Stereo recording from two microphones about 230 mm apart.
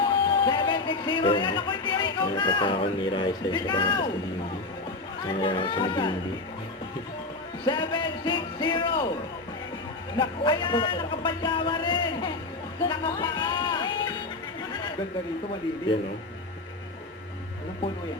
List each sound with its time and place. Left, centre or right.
0.0 s speech: left
5.4 s speech: left
7.6 s a sound: centre
10.2 s speech: left
12.9 s music: centre